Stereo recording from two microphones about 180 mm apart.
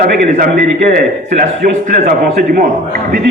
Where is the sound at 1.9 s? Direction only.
55° right (ahead or behind).